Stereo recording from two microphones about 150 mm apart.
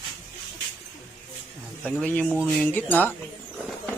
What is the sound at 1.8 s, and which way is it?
Speech, 5° left (ahead or behind).